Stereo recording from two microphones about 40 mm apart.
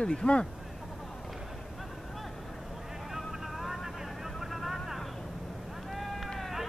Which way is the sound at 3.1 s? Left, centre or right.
Centre.